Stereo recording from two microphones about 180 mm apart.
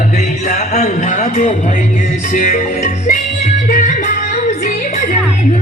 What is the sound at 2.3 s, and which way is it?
Music, 45° left (ahead or behind).